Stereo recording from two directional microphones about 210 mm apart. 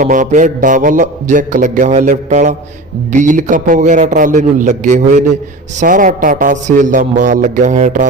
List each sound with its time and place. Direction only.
0.0 s mantra: 35° right (ahead or behind)